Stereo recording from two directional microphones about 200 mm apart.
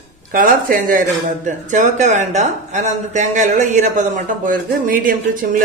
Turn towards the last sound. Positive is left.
turn(degrees=-45)  # may be behind; listen again after turning